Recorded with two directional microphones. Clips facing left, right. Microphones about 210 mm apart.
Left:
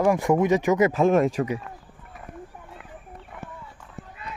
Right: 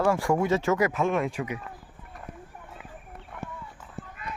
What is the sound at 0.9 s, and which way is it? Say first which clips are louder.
Speech: left 7 dB; 35° left (ahead or behind).